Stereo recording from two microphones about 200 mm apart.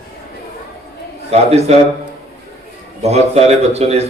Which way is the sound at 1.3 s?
30° right (ahead or behind).